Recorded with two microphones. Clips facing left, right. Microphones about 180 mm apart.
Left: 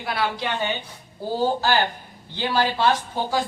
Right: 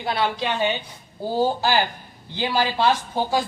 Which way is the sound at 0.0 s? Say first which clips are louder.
Right 2 dB; 25° right (ahead or behind).